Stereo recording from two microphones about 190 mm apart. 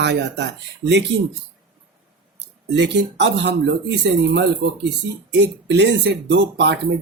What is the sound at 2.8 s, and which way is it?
Speech, 65° right (ahead or behind).